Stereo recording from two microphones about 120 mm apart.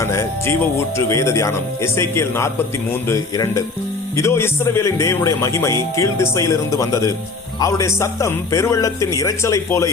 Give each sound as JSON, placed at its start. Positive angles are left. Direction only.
{"t": 0.0, "sound": "speech", "side_deg": 25}